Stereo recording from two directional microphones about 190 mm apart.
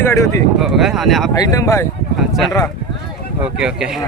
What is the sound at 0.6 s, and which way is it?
Speech, centre (ahead or behind).